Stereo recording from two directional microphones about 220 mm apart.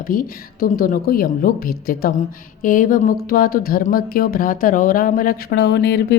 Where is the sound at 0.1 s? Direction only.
40° left (ahead or behind).